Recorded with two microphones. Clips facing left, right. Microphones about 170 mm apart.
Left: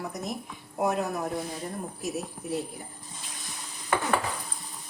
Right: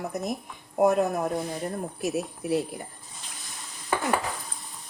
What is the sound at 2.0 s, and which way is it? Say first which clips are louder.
Speech: right 7 dB; 70° right (ahead or behind).